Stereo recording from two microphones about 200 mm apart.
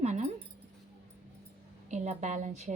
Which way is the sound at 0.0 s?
35° right (ahead or behind).